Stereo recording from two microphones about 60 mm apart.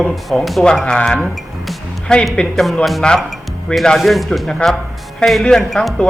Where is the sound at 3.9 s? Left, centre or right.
Centre.